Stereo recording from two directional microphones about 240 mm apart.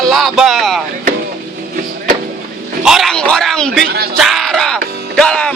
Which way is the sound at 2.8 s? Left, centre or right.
Centre.